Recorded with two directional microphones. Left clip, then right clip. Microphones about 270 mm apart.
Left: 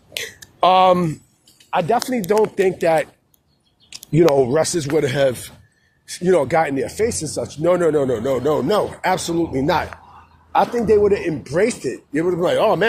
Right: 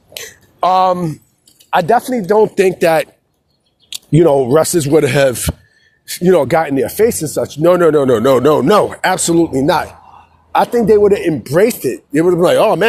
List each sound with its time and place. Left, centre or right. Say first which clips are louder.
0.1 s a sound: left 1 dB; centre
1.5 s a sound: right 6 dB; right
2.0 s speech: right 6 dB; centre
2.4 s speech: right 7 dB; right
4.1 s speech: right 5 dB; right
10.5 s speech: right 5 dB; right